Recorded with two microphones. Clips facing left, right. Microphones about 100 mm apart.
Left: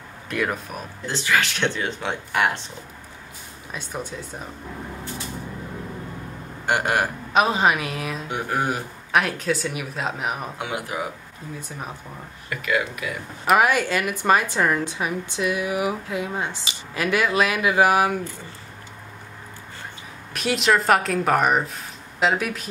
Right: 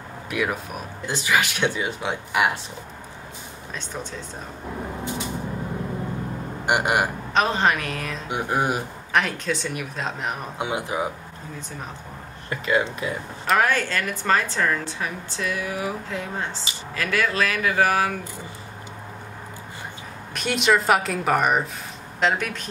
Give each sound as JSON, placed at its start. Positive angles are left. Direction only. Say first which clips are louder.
{"t": 0.3, "sound": "speech", "louder": "even", "side_deg": -5}
{"t": 1.0, "sound": "speech", "louder": "even", "side_deg": -15}
{"t": 3.7, "sound": "a woman's voice", "louder": "left 2 dB", "side_deg": 10}
{"t": 6.6, "sound": "speech", "louder": "even", "side_deg": -15}
{"t": 7.3, "sound": "a woman's voice", "louder": "left 2 dB", "side_deg": 5}
{"t": 8.3, "sound": "speech", "louder": "right 2 dB", "side_deg": -15}
{"t": 9.1, "sound": "speech", "louder": "left 2 dB", "side_deg": 5}
{"t": 10.6, "sound": "speech", "louder": "right 6 dB", "side_deg": -25}
{"t": 12.4, "sound": "speech", "louder": "right 2 dB", "side_deg": -30}
{"t": 13.5, "sound": "a woman's voice", "louder": "left 3 dB", "side_deg": 10}
{"t": 20.3, "sound": "speech", "louder": "even", "side_deg": 0}